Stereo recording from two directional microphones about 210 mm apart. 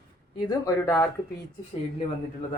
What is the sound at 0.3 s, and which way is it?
Speech, 15° left (ahead or behind).